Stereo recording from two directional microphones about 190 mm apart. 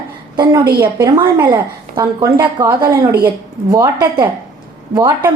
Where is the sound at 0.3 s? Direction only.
20° right (ahead or behind).